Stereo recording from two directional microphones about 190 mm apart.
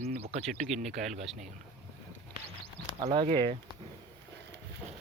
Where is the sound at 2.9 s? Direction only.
25° right (ahead or behind).